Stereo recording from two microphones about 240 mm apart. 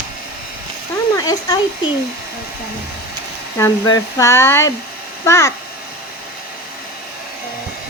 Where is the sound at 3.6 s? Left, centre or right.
Centre.